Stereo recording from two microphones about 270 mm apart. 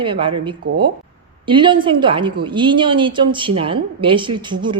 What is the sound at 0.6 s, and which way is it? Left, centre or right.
Speech, right.